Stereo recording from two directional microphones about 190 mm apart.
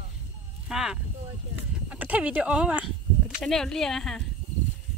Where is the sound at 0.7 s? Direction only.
Centre (ahead or behind).